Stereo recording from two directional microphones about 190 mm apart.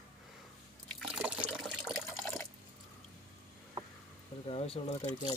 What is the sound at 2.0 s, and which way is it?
Water, 15° left (ahead or behind).